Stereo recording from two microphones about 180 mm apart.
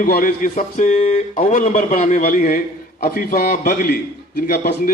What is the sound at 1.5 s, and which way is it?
A man's voice, 50° left (ahead or behind).